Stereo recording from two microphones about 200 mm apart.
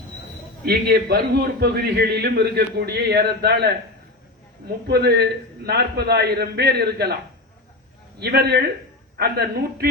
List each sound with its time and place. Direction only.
0.6 s a man's voice: 50° right (ahead or behind)
4.9 s a man's voice: 55° right (ahead or behind)
8.2 s a man's voice: 55° right (ahead or behind)